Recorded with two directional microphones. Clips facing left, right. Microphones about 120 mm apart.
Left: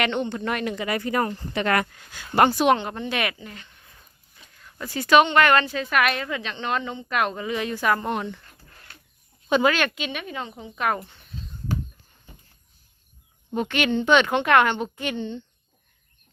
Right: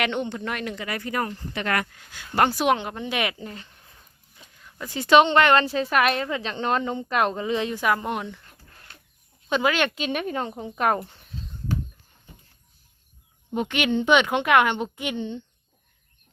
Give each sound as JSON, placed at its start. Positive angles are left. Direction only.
{"t": 0.0, "sound": "speech", "side_deg": -5}
{"t": 0.8, "sound": "speech", "side_deg": 20}
{"t": 2.5, "sound": "a woman's voice", "side_deg": -5}
{"t": 3.3, "sound": "speech", "side_deg": -35}
{"t": 4.4, "sound": "a sound", "side_deg": -10}
{"t": 4.9, "sound": "a woman's voice", "side_deg": -25}
{"t": 7.8, "sound": "a woman's voice", "side_deg": -10}
{"t": 9.7, "sound": "speech", "side_deg": -25}
{"t": 10.0, "sound": "a woman's voice", "side_deg": -45}
{"t": 13.5, "sound": "a woman's voice", "side_deg": -15}